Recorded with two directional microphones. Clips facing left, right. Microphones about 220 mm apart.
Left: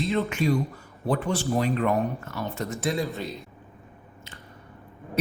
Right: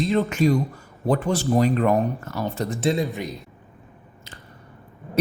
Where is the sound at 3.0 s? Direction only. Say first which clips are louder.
Right 3 dB; 15° right (ahead or behind).